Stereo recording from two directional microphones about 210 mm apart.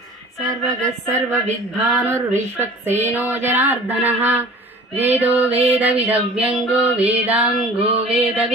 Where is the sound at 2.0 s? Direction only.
10° right (ahead or behind).